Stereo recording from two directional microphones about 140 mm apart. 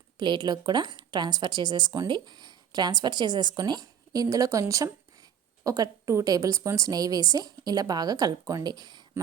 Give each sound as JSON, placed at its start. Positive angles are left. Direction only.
{"t": 0.2, "sound": "a woman's voice", "side_deg": -35}